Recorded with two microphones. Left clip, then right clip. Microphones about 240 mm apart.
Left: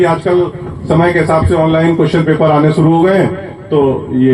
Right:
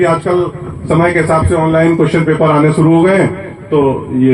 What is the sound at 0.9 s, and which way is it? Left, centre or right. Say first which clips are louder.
A man's voice: even; left.